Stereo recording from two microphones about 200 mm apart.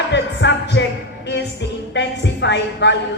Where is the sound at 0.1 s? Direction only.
60° left (ahead or behind).